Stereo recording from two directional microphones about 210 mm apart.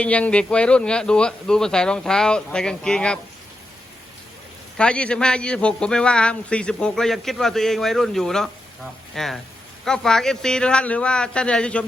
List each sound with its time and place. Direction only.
0.0 s a man's voice: 5° left (ahead or behind)
4.8 s a man's voice: 5° left (ahead or behind)